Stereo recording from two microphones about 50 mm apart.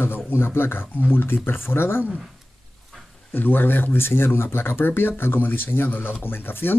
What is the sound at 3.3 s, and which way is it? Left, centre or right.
Speech, left.